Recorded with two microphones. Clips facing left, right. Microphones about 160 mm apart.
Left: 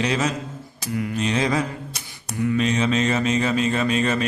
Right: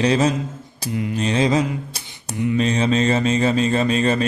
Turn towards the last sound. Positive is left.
turn(degrees=-35)  # may be behind; listen again after turning